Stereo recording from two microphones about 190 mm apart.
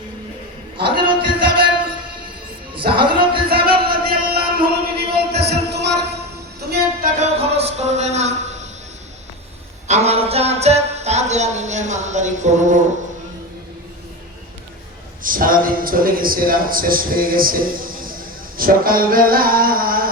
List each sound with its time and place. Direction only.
0.9 s music: 25° right (ahead or behind)
2.7 s music: 25° right (ahead or behind)
3.5 s music: 50° right (ahead or behind)
7.2 s music: 35° right (ahead or behind)
9.8 s music: 35° right (ahead or behind)
15.2 s a man's voice: 45° right (ahead or behind)